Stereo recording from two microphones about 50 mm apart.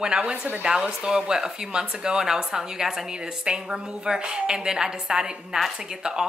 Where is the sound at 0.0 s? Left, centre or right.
Centre.